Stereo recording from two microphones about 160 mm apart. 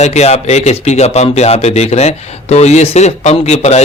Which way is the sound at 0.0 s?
45° left (ahead or behind).